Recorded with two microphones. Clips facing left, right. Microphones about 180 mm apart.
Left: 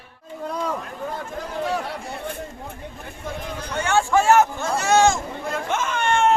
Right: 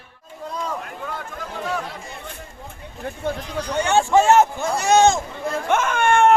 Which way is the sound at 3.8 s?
20° right (ahead or behind).